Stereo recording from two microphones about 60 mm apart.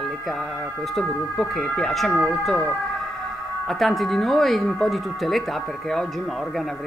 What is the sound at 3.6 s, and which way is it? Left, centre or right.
Speech, centre.